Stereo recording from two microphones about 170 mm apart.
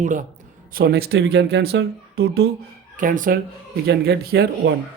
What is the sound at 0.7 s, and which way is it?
Speech, 65° right (ahead or behind).